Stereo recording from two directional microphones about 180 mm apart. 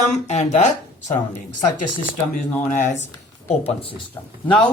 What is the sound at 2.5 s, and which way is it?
Speech, 10° left (ahead or behind).